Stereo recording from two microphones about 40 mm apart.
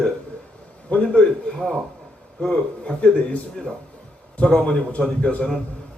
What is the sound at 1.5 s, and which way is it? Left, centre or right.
Speech, centre.